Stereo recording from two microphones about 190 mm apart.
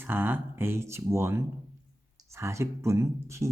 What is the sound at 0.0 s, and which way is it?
Speech, 10° right (ahead or behind).